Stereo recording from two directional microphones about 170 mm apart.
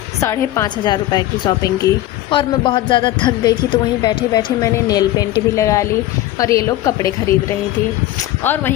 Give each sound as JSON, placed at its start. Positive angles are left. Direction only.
{"t": 0.2, "sound": "a woman's voice", "side_deg": 15}